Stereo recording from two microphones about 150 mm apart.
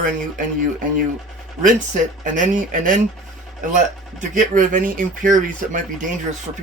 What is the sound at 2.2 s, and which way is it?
Speech, 60° right (ahead or behind).